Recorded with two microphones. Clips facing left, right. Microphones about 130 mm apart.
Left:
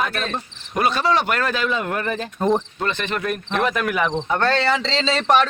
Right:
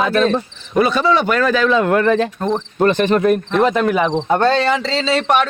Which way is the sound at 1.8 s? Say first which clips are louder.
Right 10 dB; 90° right.